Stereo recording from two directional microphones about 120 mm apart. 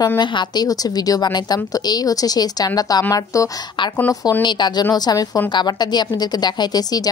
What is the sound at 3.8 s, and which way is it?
Speech, 40° left (ahead or behind).